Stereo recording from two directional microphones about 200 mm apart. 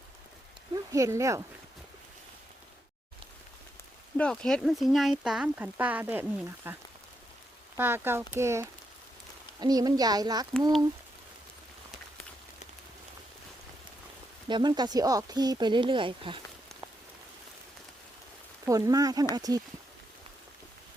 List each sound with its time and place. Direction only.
0.7 s speech: 15° right (ahead or behind)
4.2 s speech: 5° left (ahead or behind); by 10.4 s 20° right (ahead or behind)
14.4 s speech: 20° right (ahead or behind)
18.6 s speech: 20° right (ahead or behind)